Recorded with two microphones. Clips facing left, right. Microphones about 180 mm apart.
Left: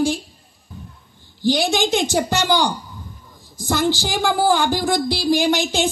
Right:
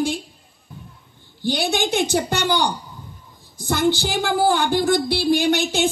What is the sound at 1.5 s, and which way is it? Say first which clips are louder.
Speech: left 3 dB; 60° right (ahead or behind).